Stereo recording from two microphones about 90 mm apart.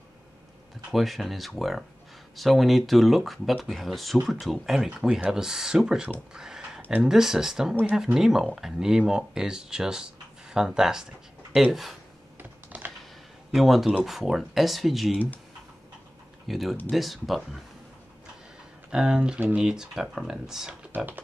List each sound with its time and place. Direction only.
0.9 s speech: centre (ahead or behind)
4.8 s speech: 10° right (ahead or behind)
6.3 s a sound: 5° right (ahead or behind)
7.0 s speech: 5° right (ahead or behind)
12.4 s computer keyboard: 20° right (ahead or behind)
13.5 s speech: centre (ahead or behind)
16.4 s speech: centre (ahead or behind)
18.9 s speech: 5° right (ahead or behind)
20.9 s speech: 20° right (ahead or behind)